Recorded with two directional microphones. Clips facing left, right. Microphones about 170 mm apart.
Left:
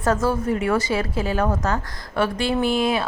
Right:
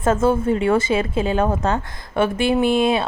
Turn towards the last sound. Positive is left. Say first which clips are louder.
# right 3 dB
turn(degrees=-25)  # may be behind; listen again after turning